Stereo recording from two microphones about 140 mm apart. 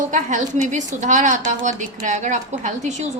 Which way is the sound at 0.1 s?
60° right (ahead or behind).